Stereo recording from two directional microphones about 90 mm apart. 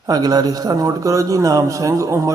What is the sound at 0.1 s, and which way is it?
A man's voice, 45° right (ahead or behind).